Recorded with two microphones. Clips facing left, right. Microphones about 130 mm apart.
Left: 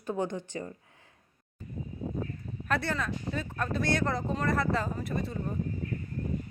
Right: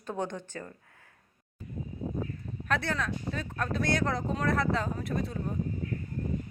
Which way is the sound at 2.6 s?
Centre (ahead or behind).